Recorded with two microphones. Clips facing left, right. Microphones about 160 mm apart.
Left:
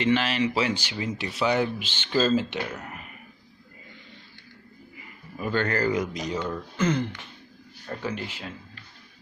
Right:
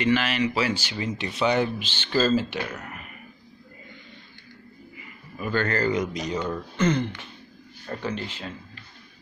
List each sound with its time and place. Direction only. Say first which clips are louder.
0.0 s speech: even; 30° left (ahead or behind)
0.7 s speech: right 1 dB; 10° left (ahead or behind); by 3.0 s 25° left (ahead or behind)
5.4 s speech: even; 20° left (ahead or behind)